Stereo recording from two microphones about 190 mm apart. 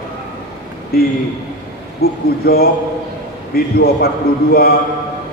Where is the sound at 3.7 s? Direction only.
55° left (ahead or behind).